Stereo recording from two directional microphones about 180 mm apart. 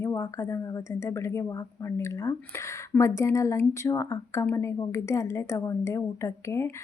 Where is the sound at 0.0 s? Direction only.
15° left (ahead or behind).